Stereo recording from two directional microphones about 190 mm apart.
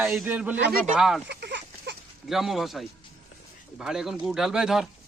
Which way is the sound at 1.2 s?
65° right (ahead or behind).